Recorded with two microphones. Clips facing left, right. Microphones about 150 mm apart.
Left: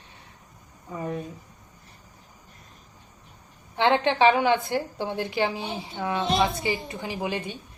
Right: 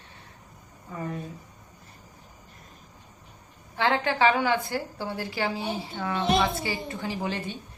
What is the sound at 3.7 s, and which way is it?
A woman's voice, 20° left (ahead or behind).